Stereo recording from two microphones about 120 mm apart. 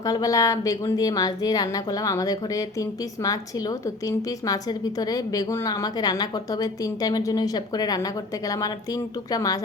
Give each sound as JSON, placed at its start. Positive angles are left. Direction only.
{"t": 0.0, "sound": "a woman's voice", "side_deg": 30}